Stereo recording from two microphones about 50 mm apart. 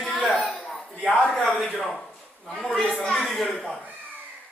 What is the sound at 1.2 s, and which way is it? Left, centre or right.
Speech, centre.